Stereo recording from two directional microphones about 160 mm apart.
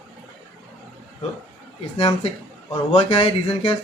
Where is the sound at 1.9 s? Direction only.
35° left (ahead or behind).